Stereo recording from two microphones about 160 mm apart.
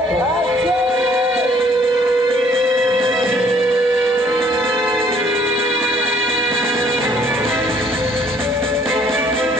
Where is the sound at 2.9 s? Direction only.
Centre (ahead or behind).